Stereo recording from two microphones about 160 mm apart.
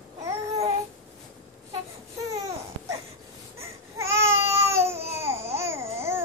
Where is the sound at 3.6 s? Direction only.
15° right (ahead or behind).